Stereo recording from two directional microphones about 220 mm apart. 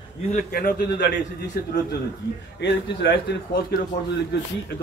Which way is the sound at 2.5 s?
55° left (ahead or behind).